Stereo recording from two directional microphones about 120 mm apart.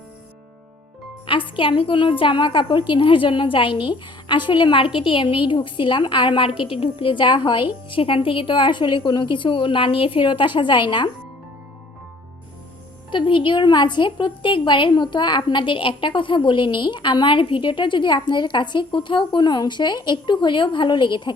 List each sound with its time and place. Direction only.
1.3 s a woman's voice: 45° left (ahead or behind)
13.1 s a woman's voice: 45° left (ahead or behind)